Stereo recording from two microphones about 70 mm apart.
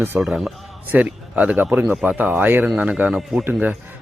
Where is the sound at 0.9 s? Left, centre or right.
Right.